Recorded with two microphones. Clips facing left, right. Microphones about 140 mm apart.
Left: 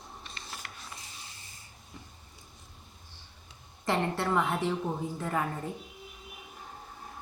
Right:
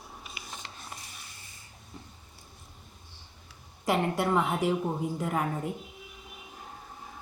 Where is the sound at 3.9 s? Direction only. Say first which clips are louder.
Right 2 dB; 10° right (ahead or behind).